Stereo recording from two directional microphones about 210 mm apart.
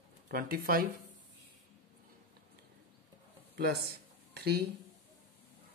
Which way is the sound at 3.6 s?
50° right (ahead or behind).